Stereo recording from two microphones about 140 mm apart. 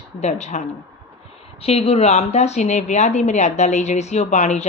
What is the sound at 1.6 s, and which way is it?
A woman's voice, 45° left (ahead or behind).